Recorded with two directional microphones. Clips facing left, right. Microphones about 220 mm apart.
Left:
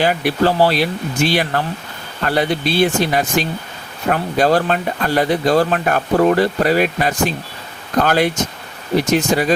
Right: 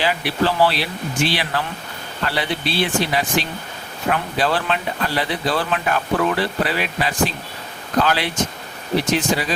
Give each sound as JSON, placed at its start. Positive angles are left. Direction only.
{"t": 0.0, "sound": "speech", "side_deg": 45}